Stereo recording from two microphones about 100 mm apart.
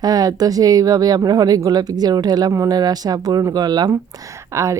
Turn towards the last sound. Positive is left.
turn(degrees=-30)  # may be behind; listen again after turning